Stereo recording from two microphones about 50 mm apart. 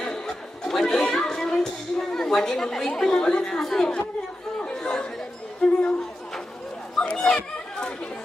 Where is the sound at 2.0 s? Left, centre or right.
Centre.